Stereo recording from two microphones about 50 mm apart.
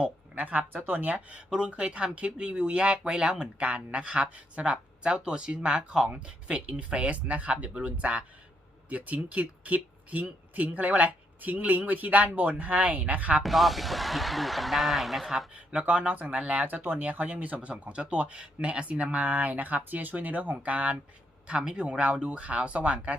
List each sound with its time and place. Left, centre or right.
0.0 s speech: right
1.1 s speech: right
13.4 s speech: centre
15.5 s speech: right
16.6 s speech: right